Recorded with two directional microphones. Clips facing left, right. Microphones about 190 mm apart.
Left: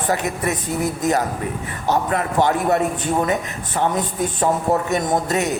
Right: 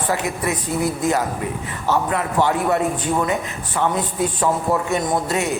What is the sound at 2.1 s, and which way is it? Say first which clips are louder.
Speech: left 1 dB; 40° left (ahead or behind).